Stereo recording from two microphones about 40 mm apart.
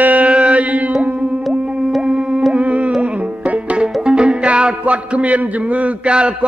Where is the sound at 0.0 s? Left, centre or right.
Right.